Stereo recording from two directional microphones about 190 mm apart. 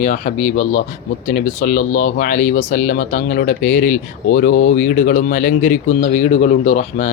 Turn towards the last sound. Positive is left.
turn(degrees=40)  # may be behind; listen again after turning